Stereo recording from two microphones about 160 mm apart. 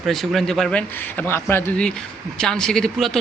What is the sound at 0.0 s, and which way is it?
A man's voice, centre (ahead or behind).